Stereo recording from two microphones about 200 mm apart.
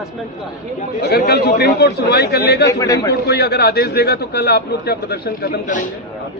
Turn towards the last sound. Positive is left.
turn(degrees=45)  # may be behind; listen again after turning